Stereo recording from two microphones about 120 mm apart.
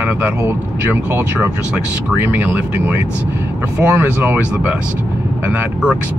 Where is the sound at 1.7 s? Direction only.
15° right (ahead or behind).